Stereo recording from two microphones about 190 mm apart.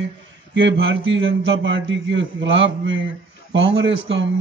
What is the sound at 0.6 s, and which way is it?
A man's voice, 75° right (ahead or behind).